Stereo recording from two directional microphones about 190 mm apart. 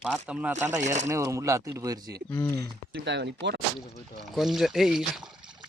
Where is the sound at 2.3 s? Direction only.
15° left (ahead or behind).